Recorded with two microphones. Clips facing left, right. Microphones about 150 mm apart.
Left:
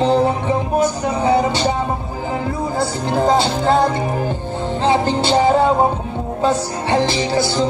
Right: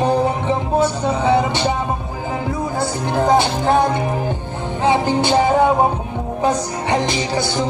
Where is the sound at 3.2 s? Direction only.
20° right (ahead or behind).